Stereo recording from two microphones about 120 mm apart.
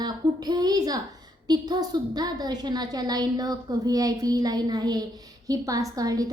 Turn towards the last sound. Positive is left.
turn(degrees=-30)  # may be behind; listen again after turning